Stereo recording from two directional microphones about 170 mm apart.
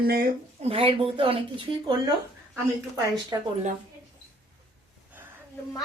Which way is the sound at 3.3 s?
20° right (ahead or behind).